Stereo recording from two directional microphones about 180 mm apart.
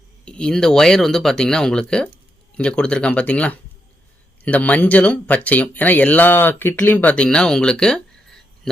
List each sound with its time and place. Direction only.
0.3 s speech: 5° left (ahead or behind)